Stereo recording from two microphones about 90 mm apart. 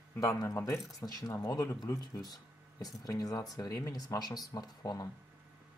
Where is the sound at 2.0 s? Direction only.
45° left (ahead or behind).